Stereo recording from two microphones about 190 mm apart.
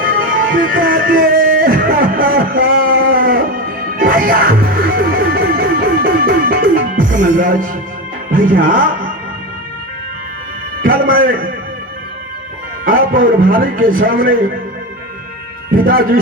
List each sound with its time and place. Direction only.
0.0 s music: 45° right (ahead or behind)
8.3 s a man's voice: 45° right (ahead or behind)
10.8 s a man's voice: 50° right (ahead or behind)
12.8 s a man's voice: 50° right (ahead or behind)
15.7 s a man's voice: 50° right (ahead or behind)